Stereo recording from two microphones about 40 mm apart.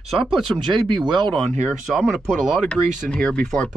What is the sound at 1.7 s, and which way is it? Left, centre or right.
Speech, centre.